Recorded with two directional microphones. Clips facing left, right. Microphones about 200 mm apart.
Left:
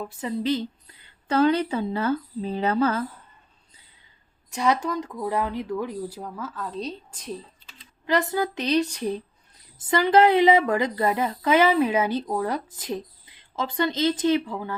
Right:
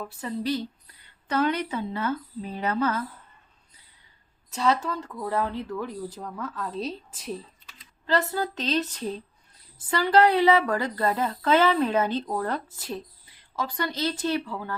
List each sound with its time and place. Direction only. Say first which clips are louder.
0.1 s a woman's voice: left 3 dB; 20° left (ahead or behind)
4.5 s speech: left 2 dB; 15° left (ahead or behind); by 7.3 s 5° right (ahead or behind)
8.0 s speech: left 2 dB; 15° left (ahead or behind)